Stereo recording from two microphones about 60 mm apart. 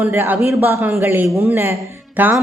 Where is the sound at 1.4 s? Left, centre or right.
Right.